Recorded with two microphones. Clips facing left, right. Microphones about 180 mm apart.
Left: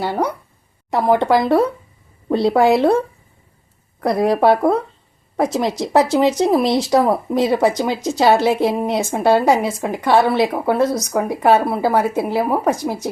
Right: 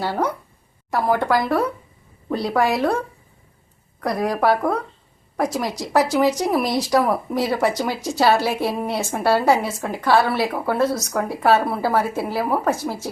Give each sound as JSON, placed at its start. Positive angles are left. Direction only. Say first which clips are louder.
{"t": 0.0, "sound": "a woman's voice", "louder": "left 2 dB", "side_deg": 15}
{"t": 4.0, "sound": "a woman's voice", "louder": "left 5 dB", "side_deg": 25}